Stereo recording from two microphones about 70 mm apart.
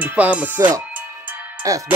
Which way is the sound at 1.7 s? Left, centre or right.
Right.